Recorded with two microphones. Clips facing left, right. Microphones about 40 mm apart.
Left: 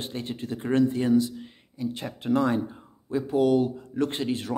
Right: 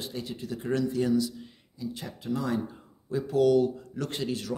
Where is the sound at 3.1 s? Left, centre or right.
Left.